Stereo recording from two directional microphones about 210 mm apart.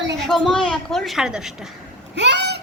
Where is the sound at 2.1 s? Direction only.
55° right (ahead or behind).